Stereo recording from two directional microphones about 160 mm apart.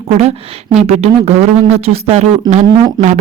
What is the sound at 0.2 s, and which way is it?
A woman's voice, 40° right (ahead or behind).